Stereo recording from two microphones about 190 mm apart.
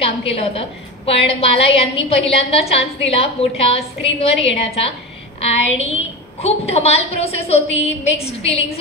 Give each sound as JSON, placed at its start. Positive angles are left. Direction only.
{"t": 0.0, "sound": "a woman's voice", "side_deg": 30}